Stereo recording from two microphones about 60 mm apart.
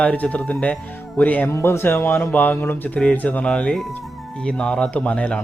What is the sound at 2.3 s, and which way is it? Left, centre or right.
A man's voice, left.